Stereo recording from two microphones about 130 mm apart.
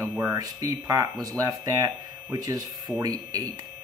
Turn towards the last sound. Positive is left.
turn(degrees=-30)  # may be behind; listen again after turning